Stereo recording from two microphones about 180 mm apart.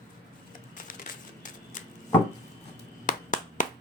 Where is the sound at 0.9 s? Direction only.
50° left (ahead or behind).